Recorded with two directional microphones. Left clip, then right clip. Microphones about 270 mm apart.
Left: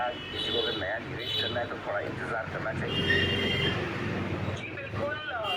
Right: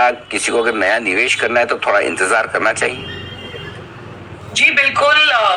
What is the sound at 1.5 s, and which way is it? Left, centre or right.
A man's voice, right.